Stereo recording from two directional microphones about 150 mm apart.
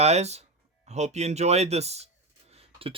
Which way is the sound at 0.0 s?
45° right (ahead or behind).